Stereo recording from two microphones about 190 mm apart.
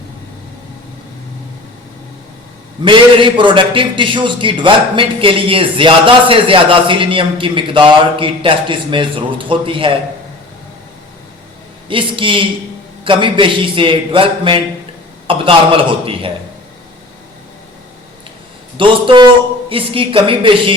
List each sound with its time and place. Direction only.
2.8 s a man's voice: 25° right (ahead or behind)
11.9 s a man's voice: 25° right (ahead or behind)
18.8 s a man's voice: 25° right (ahead or behind)